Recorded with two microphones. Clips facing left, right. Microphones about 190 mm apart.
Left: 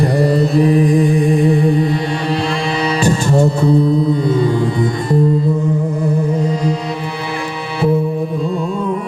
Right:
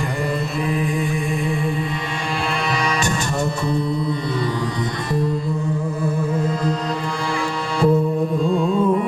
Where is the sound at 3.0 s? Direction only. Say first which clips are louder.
Left 9 dB; 35° left (ahead or behind).